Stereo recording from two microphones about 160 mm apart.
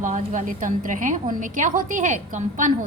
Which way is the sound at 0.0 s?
50° right (ahead or behind).